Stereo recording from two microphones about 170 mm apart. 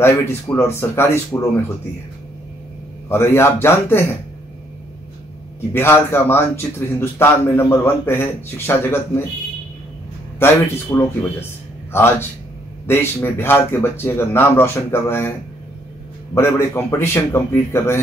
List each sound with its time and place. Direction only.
0.0 s a man's voice: 15° left (ahead or behind)
3.1 s a man's voice: 15° left (ahead or behind)
5.7 s a man's voice: 15° left (ahead or behind)
10.9 s a man's voice: 15° left (ahead or behind)
16.3 s a man's voice: 15° left (ahead or behind)